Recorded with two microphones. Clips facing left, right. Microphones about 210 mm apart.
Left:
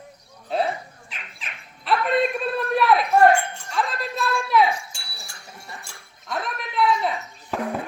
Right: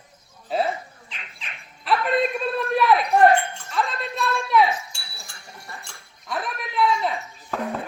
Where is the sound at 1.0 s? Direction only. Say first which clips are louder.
Left 1 dB; centre (ahead or behind).